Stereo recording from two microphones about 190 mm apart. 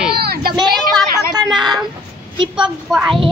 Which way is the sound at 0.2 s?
55° right (ahead or behind).